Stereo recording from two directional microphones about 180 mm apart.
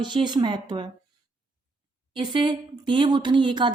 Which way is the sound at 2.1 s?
25° right (ahead or behind).